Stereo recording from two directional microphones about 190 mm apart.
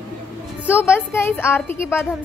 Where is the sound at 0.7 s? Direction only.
10° left (ahead or behind).